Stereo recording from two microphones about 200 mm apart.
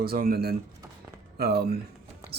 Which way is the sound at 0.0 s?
50° right (ahead or behind).